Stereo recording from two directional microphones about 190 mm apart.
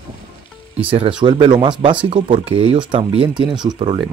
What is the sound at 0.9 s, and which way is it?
Speech, 25° right (ahead or behind).